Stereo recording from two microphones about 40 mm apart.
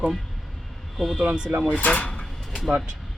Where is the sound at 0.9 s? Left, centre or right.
Centre.